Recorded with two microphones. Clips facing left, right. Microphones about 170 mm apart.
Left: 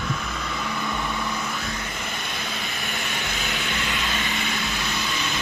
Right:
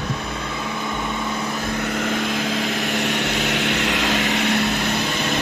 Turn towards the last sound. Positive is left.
turn(degrees=-50)  # may be behind; listen again after turning